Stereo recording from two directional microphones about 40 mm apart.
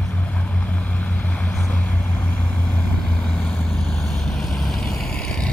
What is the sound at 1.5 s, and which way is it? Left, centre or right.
Vehicle, left.